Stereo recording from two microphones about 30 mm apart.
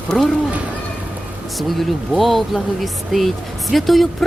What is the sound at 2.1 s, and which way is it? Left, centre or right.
Speech, centre.